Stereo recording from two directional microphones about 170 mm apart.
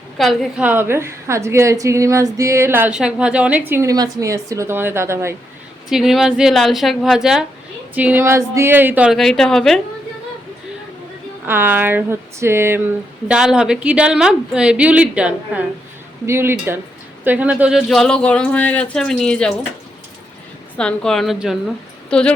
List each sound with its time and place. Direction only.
0.2 s a woman's voice: 5° right (ahead or behind)
5.9 s a woman's voice: centre (ahead or behind)
11.4 s a woman's voice: 15° right (ahead or behind)
13.2 s a woman's voice: 5° right (ahead or behind)
20.7 s speech: 5° left (ahead or behind)